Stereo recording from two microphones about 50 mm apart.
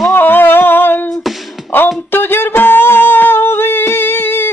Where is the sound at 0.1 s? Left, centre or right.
Left.